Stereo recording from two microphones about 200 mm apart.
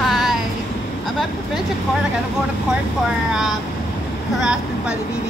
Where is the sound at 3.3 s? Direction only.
Centre (ahead or behind).